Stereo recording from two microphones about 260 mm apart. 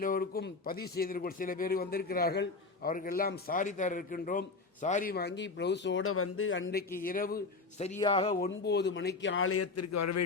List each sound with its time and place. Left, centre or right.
0.0 s a man's voice: left
8.4 s a man's voice: left